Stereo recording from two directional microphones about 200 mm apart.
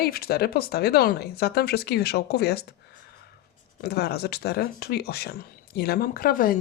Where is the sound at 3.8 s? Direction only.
55° left (ahead or behind).